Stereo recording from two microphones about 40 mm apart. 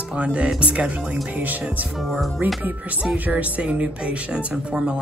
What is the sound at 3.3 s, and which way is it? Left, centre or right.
Speech, right.